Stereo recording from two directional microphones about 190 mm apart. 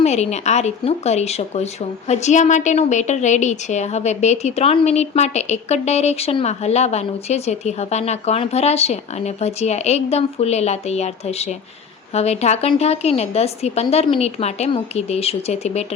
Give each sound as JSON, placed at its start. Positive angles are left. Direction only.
{"t": 0.0, "sound": "speech", "side_deg": 35}